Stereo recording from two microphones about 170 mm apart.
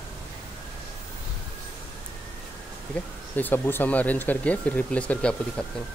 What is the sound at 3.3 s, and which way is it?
Speech, 10° left (ahead or behind).